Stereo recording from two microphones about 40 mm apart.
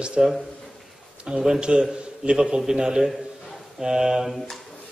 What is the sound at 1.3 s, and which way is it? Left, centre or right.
A man's voice, right.